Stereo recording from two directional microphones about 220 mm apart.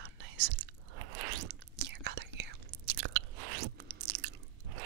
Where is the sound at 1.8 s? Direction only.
50° right (ahead or behind).